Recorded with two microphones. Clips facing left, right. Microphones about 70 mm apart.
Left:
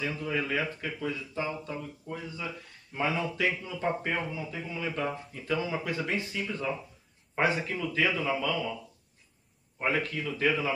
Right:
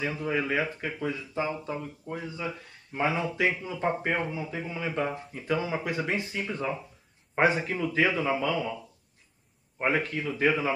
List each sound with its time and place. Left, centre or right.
0.0 s speech: right